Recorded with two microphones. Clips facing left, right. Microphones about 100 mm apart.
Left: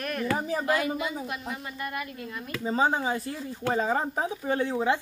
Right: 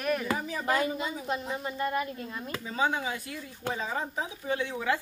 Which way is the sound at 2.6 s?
35° left (ahead or behind).